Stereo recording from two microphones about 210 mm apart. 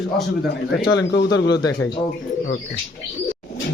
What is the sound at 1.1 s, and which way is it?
Speech, 55° left (ahead or behind).